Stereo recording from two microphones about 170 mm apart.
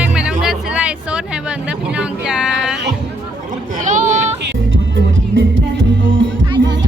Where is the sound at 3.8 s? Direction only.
50° right (ahead or behind).